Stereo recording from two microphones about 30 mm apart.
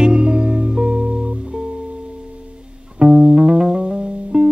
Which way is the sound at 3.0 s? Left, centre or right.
Right.